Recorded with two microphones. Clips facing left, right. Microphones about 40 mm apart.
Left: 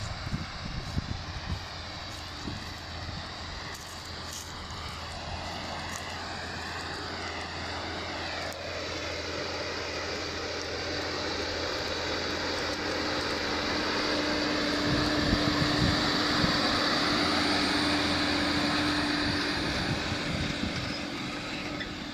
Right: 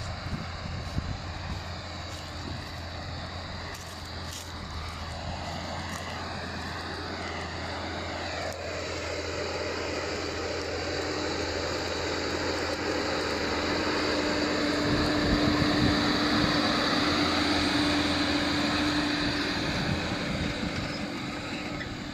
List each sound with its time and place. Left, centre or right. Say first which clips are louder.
8.1 s vehicle: right 1 dB; centre
8.6 s vehicle: right 1 dB; right
11.9 s vehicle: right 1 dB; left
12.2 s vehicle: right 2 dB; right
21.0 s vehicle: right 1 dB; left
21.4 s vehicle: right 1 dB; centre